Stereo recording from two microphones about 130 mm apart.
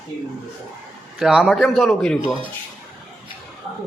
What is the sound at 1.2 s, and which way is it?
Speech, 5° right (ahead or behind).